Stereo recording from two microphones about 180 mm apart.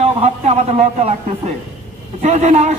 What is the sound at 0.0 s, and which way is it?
A man's voice, 35° right (ahead or behind).